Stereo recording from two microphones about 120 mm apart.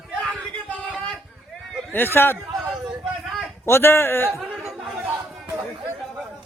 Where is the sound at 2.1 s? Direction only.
20° left (ahead or behind).